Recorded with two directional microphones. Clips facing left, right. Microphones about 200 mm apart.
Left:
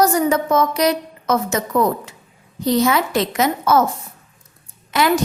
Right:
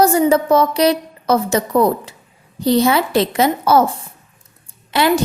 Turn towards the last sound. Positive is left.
turn(degrees=-30)  # may be behind; listen again after turning